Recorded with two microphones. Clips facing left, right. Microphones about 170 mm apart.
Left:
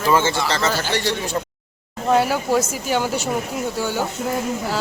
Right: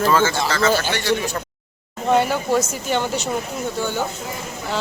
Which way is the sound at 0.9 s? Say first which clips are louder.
Right 1 dB; 35° left (ahead or behind).